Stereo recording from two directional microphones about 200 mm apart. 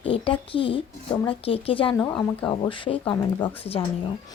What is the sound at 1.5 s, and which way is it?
Speech, 30° left (ahead or behind).